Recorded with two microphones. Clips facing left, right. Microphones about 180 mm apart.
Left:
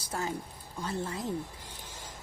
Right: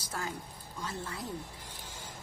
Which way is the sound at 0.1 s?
25° left (ahead or behind).